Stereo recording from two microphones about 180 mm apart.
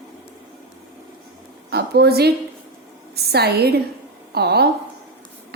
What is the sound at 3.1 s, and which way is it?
A woman's voice, 65° right (ahead or behind).